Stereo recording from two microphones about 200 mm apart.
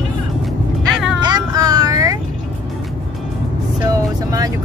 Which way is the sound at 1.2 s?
20° right (ahead or behind).